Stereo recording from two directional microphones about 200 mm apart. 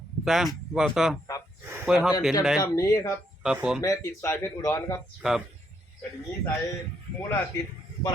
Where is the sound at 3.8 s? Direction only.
15° left (ahead or behind).